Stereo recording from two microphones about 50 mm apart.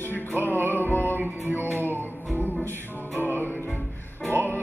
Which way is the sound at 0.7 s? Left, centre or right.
Left.